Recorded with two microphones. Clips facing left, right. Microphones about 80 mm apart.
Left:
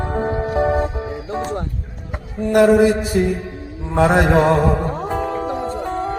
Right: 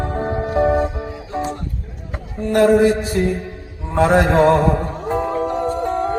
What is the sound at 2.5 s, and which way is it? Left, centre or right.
Mantra, centre.